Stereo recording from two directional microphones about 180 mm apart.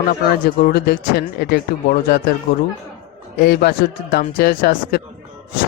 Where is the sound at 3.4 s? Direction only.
60° left (ahead or behind).